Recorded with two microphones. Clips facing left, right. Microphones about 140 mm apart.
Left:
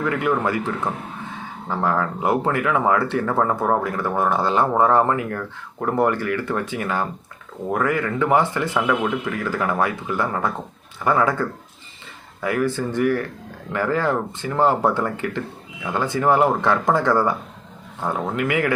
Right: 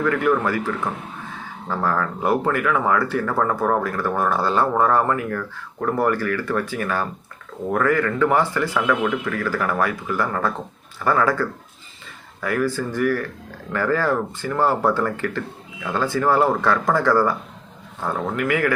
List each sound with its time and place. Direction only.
0.0 s speech: 20° left (ahead or behind)
1.7 s speech: 20° left (ahead or behind)